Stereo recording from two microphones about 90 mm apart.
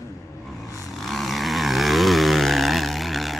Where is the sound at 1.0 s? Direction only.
Centre (ahead or behind).